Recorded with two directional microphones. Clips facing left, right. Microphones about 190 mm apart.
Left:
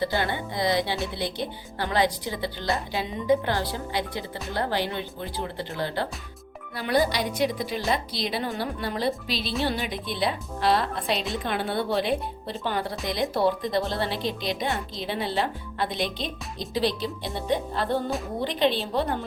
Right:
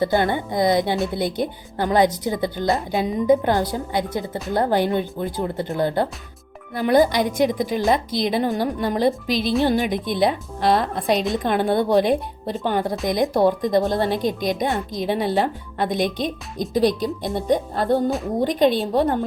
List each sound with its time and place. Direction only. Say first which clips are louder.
0.0 s speech: right 7 dB; 50° right (ahead or behind)